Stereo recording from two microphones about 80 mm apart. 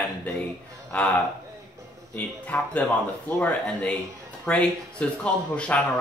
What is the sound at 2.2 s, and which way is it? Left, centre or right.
Speech, centre.